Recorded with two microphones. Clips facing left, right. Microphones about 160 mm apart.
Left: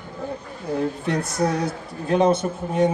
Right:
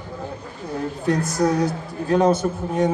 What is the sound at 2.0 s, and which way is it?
Speech, 20° left (ahead or behind).